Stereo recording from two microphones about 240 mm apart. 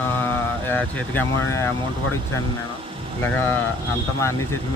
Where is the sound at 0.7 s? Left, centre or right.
Centre.